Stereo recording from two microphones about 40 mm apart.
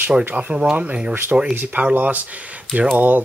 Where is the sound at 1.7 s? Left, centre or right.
Right.